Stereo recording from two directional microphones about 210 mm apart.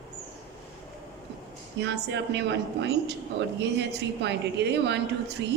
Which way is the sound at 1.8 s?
55° right (ahead or behind).